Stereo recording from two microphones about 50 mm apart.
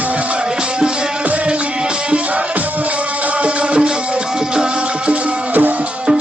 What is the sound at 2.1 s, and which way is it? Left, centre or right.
Music, right.